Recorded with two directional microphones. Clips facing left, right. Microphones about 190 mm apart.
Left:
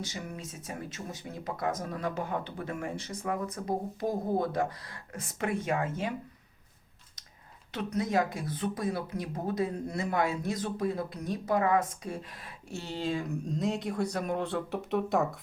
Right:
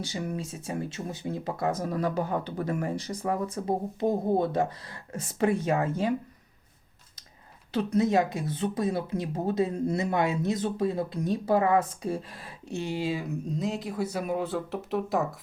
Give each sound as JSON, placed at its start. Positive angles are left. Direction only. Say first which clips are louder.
{"t": 0.0, "sound": "speech", "louder": "right 6 dB", "side_deg": -30}
{"t": 7.7, "sound": "speech", "louder": "right 6 dB", "side_deg": -30}
{"t": 12.6, "sound": "speech", "louder": "right 4 dB", "side_deg": -15}